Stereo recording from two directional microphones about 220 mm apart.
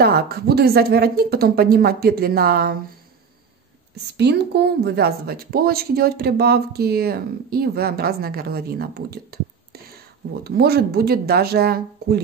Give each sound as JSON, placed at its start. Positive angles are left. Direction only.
{"t": 0.0, "sound": "speech", "side_deg": -45}
{"t": 4.2, "sound": "speech", "side_deg": -50}